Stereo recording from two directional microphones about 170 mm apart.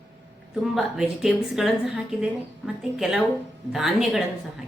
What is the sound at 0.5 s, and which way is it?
Speech, centre (ahead or behind).